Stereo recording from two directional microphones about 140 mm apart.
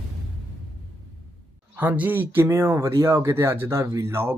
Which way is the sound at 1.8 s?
10° right (ahead or behind).